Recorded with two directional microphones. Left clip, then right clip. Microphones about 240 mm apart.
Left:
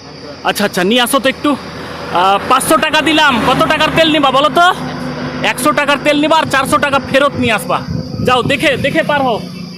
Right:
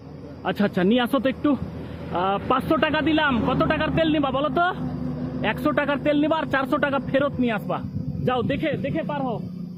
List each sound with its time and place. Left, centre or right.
0.4 s speech: centre